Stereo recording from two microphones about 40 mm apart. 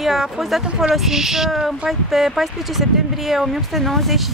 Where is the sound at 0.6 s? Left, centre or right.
Right.